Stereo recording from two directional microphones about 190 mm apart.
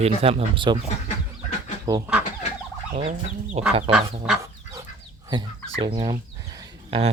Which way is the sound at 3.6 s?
30° right (ahead or behind).